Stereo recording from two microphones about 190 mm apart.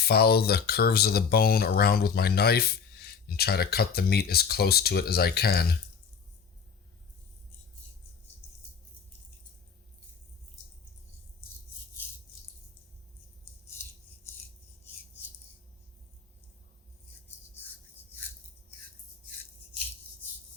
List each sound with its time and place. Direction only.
0.0 s speech: 55° left (ahead or behind)